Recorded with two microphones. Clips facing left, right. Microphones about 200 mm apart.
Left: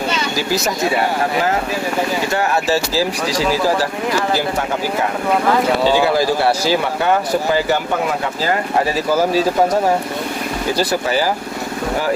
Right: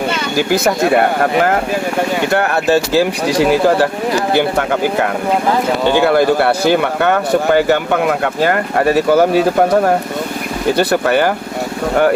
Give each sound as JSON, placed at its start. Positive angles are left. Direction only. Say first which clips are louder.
{"t": 0.1, "sound": "speech", "louder": "right 4 dB", "side_deg": -55}